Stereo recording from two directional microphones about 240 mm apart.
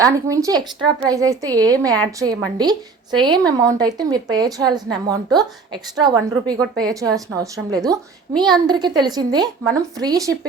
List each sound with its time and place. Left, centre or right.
0.0 s speech: centre